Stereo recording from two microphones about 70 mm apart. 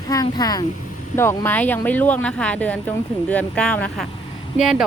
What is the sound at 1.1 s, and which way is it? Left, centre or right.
Speech, left.